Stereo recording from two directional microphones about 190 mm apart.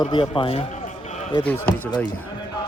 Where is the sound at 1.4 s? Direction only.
10° left (ahead or behind).